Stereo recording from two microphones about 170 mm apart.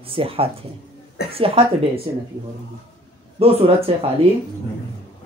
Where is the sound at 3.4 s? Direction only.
35° right (ahead or behind).